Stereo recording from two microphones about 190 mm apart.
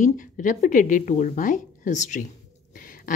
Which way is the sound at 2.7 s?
45° left (ahead or behind).